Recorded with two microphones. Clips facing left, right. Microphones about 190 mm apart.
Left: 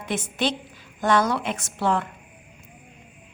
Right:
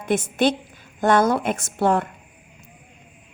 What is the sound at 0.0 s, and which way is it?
A woman's voice, 50° right (ahead or behind).